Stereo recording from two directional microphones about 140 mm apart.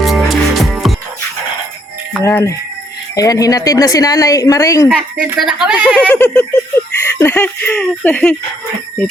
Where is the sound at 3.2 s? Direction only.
25° left (ahead or behind).